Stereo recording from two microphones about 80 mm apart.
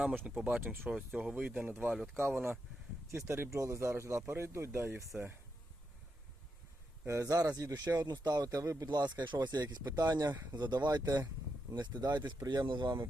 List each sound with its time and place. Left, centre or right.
0.0 s speech: centre
0.9 s speech: centre
1.3 s speech: centre
2.1 s speech: right
7.1 s speech: right
8.9 s speech: right
9.5 s speech: right
12.5 s speech: right